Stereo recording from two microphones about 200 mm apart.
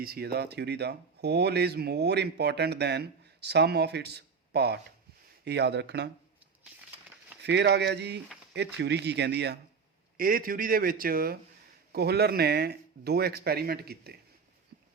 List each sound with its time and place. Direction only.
0.0 s speech: 50° right (ahead or behind)
7.4 s speech: 60° right (ahead or behind)
10.2 s speech: 45° right (ahead or behind)